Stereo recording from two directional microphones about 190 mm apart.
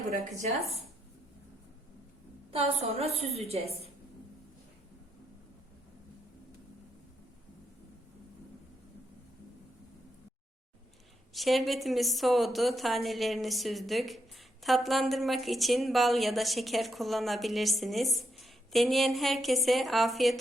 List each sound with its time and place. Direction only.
2.5 s a woman's voice: 30° right (ahead or behind)
11.3 s a woman's voice: centre (ahead or behind)